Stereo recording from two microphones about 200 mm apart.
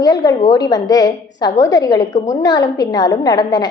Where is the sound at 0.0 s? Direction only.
20° left (ahead or behind).